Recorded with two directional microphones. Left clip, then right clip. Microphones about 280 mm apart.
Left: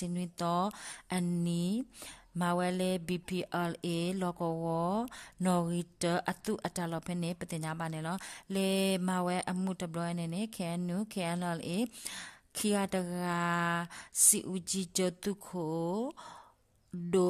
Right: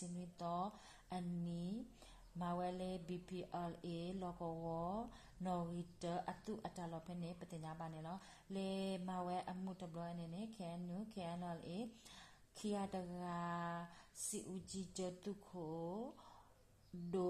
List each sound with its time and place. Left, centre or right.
0.2 s speech: left